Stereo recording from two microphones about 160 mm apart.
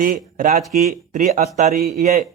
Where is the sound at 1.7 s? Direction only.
70° right (ahead or behind).